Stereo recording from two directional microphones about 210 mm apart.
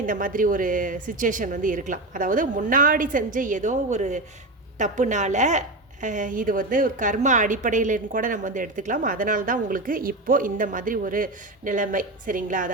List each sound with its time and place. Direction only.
0.0 s a woman's voice: 40° right (ahead or behind)